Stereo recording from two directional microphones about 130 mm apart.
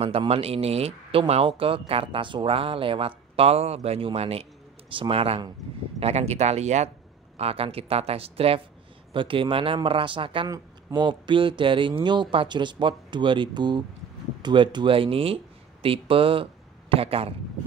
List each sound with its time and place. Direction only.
0.3 s speech: 50° right (ahead or behind)
7.3 s speech: 50° right (ahead or behind)